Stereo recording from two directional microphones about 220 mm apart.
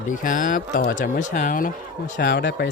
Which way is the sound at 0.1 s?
35° left (ahead or behind).